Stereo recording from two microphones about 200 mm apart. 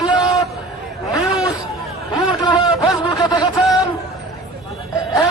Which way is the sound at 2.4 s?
20° left (ahead or behind).